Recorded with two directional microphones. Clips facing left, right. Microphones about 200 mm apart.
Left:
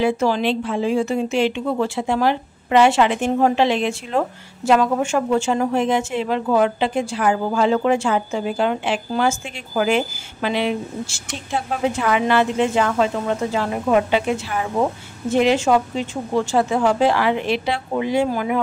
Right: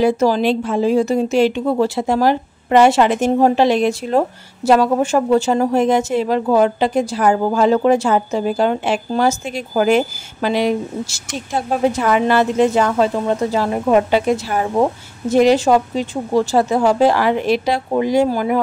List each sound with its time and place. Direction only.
0.0 s speech: 40° right (ahead or behind)